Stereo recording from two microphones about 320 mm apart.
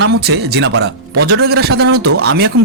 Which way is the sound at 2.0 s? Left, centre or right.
Right.